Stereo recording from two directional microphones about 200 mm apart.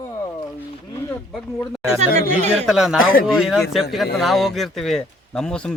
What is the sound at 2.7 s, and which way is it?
Speech, centre (ahead or behind).